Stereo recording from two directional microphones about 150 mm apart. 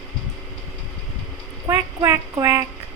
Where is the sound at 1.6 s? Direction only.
20° right (ahead or behind).